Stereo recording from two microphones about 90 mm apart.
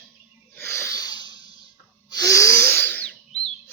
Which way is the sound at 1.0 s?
50° left (ahead or behind).